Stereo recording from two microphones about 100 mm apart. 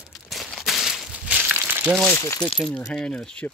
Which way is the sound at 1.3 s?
15° right (ahead or behind).